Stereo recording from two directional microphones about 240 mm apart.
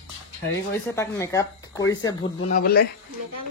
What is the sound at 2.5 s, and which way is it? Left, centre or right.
Speech, left.